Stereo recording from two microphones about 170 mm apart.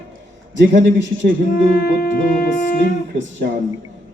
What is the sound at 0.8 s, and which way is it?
Speech, 90° right.